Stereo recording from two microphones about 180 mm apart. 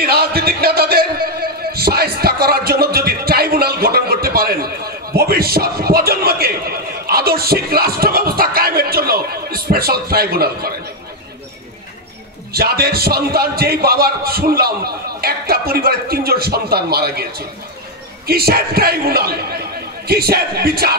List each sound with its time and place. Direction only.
0.0 s music: 60° right (ahead or behind)
12.5 s a man's voice: 60° right (ahead or behind)